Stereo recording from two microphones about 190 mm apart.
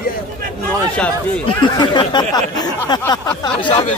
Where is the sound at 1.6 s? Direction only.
25° left (ahead or behind).